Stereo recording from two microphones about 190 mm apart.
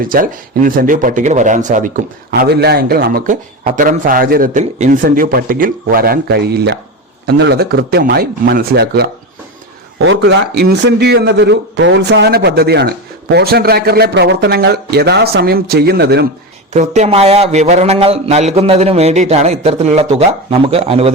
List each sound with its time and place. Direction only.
0.0 s speech: 45° right (ahead or behind)
2.3 s a man's voice: 55° right (ahead or behind)
10.0 s a man's voice: 70° right (ahead or behind)
16.7 s a man's voice: 40° right (ahead or behind)